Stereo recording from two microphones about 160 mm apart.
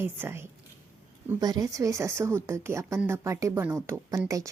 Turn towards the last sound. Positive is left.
turn(degrees=-20)  # may be behind; listen again after turning